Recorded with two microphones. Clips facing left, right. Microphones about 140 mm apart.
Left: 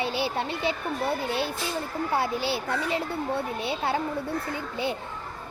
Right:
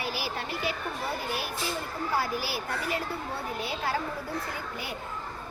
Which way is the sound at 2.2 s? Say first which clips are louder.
Left 4 dB; 25° left (ahead or behind).